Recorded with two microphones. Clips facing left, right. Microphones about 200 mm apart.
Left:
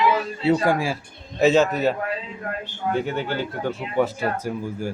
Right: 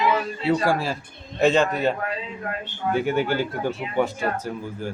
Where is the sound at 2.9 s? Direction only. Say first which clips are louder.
Right 4 dB; 10° right (ahead or behind).